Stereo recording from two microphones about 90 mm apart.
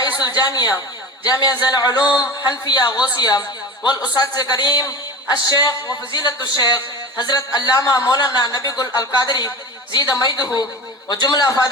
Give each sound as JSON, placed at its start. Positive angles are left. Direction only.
{"t": 0.2, "sound": "a woman's voice", "side_deg": 50}